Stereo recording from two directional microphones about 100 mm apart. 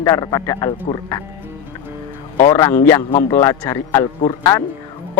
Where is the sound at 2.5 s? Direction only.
30° left (ahead or behind).